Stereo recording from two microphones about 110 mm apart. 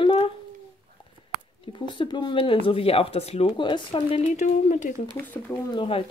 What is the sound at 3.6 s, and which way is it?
Speech, 45° left (ahead or behind).